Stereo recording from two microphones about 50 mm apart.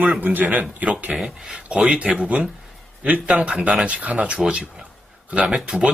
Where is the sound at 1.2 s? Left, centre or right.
Centre.